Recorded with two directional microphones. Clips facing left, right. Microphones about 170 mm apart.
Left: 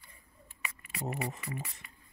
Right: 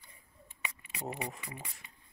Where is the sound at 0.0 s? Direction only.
20° right (ahead or behind).